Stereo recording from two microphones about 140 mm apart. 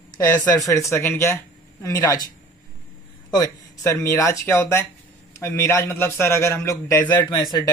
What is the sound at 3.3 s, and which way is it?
A man's voice, 25° left (ahead or behind).